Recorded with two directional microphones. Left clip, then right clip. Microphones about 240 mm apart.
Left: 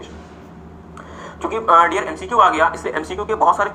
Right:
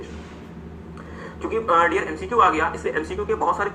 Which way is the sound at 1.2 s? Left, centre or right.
Left.